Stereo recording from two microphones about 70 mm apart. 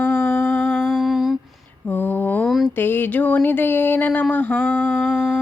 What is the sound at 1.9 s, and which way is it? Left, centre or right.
Mantra, left.